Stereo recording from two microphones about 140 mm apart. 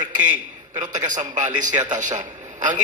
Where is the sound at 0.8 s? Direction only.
65° right (ahead or behind).